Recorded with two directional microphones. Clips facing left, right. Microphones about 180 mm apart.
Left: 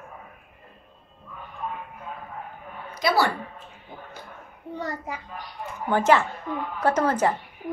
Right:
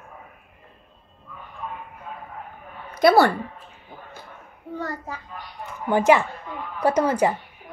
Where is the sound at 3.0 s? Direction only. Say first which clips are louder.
Right 7 dB; 55° right (ahead or behind).